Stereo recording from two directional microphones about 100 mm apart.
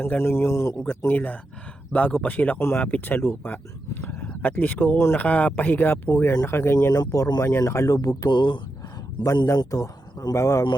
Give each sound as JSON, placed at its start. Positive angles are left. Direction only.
{"t": 0.0, "sound": "a man's voice", "side_deg": 20}
{"t": 0.9, "sound": "a man's voice", "side_deg": 20}
{"t": 6.7, "sound": "speech", "side_deg": 40}
{"t": 8.3, "sound": "speech", "side_deg": 50}
{"t": 9.5, "sound": "speech", "side_deg": 35}